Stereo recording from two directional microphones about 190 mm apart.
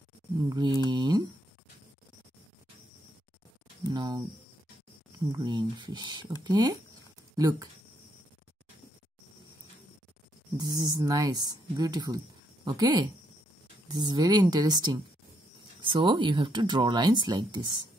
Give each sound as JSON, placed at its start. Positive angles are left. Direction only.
{"t": 0.4, "sound": "speech", "side_deg": -20}
{"t": 3.9, "sound": "speech", "side_deg": -20}
{"t": 5.4, "sound": "speech", "side_deg": -25}
{"t": 10.6, "sound": "speech", "side_deg": -20}